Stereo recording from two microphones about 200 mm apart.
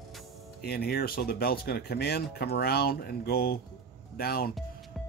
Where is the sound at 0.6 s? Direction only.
50° left (ahead or behind).